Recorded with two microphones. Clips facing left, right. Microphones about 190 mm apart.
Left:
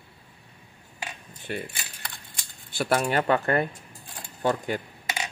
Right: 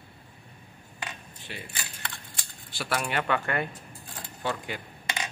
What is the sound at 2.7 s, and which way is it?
Speech, 50° left (ahead or behind).